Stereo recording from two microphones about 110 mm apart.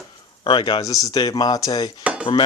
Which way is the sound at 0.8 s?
30° left (ahead or behind).